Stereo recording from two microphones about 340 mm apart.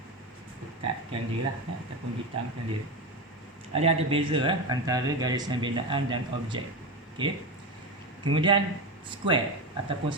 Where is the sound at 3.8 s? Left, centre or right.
Centre.